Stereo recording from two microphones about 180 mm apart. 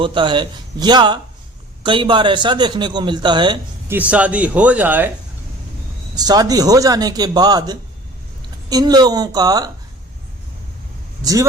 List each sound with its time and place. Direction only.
0.0 s a man's voice: 25° right (ahead or behind)
3.8 s speech: 10° right (ahead or behind)
6.1 s a man's voice: 20° right (ahead or behind)
11.2 s speech: 20° right (ahead or behind)